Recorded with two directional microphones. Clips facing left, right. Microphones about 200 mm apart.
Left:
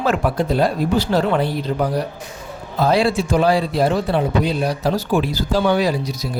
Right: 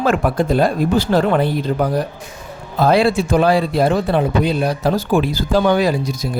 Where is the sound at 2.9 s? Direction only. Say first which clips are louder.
Right 3 dB; 55° right (ahead or behind).